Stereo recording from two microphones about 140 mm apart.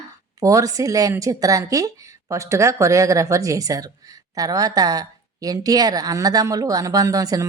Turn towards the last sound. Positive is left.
turn(degrees=-25)  # may be behind; listen again after turning